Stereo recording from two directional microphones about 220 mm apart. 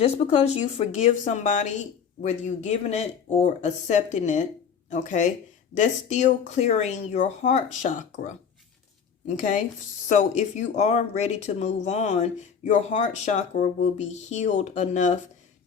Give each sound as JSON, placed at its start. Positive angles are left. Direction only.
{"t": 0.0, "sound": "speech", "side_deg": 30}